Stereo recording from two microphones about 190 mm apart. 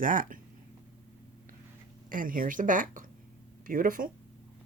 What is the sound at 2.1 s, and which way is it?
Speech, 45° right (ahead or behind).